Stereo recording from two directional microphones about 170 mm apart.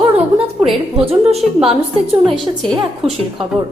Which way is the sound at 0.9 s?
35° right (ahead or behind).